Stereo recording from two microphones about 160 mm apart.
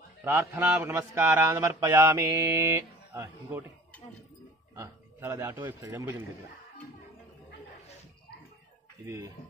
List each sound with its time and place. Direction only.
0.2 s a man's voice: 15° right (ahead or behind)
4.7 s a man's voice: 15° right (ahead or behind)
9.0 s a man's voice: 15° right (ahead or behind)